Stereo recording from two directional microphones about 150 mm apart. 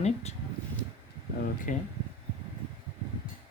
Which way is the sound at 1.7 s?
60° left (ahead or behind).